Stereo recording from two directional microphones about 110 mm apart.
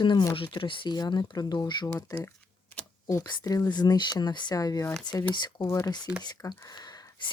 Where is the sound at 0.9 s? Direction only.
40° left (ahead or behind).